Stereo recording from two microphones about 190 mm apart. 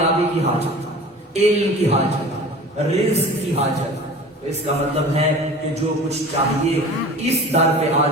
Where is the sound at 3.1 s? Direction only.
35° right (ahead or behind).